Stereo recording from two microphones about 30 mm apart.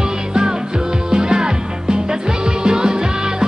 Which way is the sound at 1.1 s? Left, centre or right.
Right.